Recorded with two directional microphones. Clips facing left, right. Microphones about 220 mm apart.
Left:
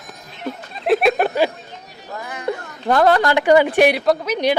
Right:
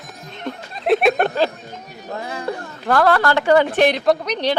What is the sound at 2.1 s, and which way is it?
Music, 30° right (ahead or behind).